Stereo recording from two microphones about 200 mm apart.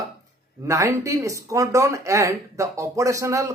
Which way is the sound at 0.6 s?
15° right (ahead or behind).